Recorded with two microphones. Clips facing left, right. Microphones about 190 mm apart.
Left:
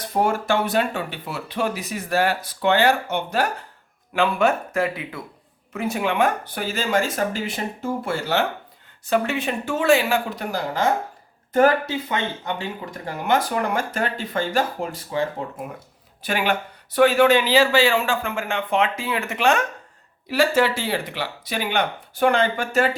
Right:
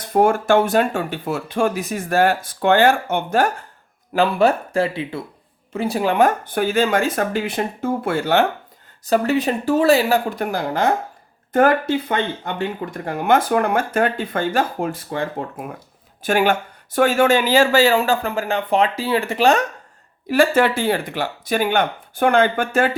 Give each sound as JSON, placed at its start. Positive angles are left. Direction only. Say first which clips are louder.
{"t": 0.1, "sound": "speech", "louder": "right 6 dB", "side_deg": -50}
{"t": 4.1, "sound": "speech", "louder": "right 3 dB", "side_deg": -35}
{"t": 9.0, "sound": "speech", "louder": "right 4 dB", "side_deg": -40}
{"t": 10.3, "sound": "speech", "louder": "right 4 dB", "side_deg": -55}
{"t": 16.2, "sound": "speech", "louder": "right 5 dB", "side_deg": -50}
{"t": 20.3, "sound": "speech", "louder": "right 3 dB", "side_deg": -55}